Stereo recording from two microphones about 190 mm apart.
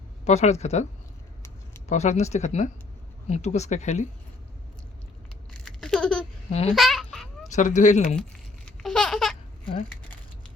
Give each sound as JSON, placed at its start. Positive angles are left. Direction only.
{"t": 0.3, "sound": "speech", "side_deg": 35}
{"t": 1.9, "sound": "speech", "side_deg": 35}
{"t": 5.6, "sound": "babbling", "side_deg": 5}
{"t": 6.5, "sound": "speech", "side_deg": 35}
{"t": 6.7, "sound": "babbling", "side_deg": 0}
{"t": 7.5, "sound": "speech", "side_deg": 40}
{"t": 8.6, "sound": "laughter", "side_deg": 5}